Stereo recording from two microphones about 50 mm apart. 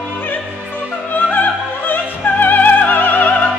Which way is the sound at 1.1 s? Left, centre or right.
Left.